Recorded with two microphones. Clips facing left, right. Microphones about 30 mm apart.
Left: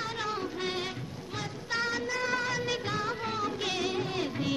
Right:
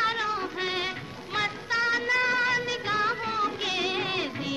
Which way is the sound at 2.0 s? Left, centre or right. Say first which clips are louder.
Right 6 dB; right.